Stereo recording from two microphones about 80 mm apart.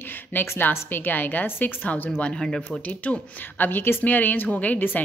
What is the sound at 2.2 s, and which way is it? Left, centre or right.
A woman's voice, centre.